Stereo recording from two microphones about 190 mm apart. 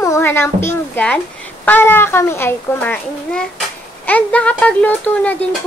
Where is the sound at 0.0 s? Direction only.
15° left (ahead or behind).